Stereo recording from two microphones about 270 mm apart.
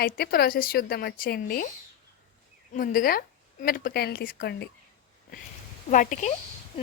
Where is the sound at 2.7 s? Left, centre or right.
Left.